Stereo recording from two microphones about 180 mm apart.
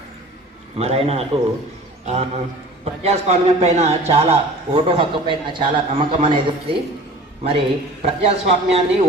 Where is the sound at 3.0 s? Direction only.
35° right (ahead or behind).